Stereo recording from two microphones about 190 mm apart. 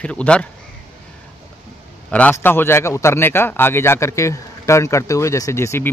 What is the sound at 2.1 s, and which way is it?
A man's voice, 10° left (ahead or behind).